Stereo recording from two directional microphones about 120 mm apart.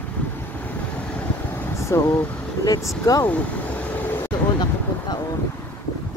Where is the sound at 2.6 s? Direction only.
30° left (ahead or behind).